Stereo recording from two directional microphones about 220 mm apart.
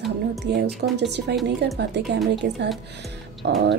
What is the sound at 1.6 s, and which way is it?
A woman's voice, 50° right (ahead or behind).